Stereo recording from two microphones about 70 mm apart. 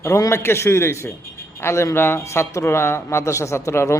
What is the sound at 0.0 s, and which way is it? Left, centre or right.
A man's voice, left.